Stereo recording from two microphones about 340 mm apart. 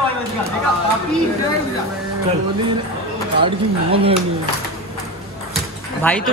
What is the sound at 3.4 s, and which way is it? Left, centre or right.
Speech, centre.